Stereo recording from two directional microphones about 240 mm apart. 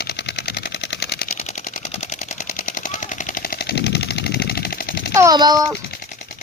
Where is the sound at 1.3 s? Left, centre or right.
Left.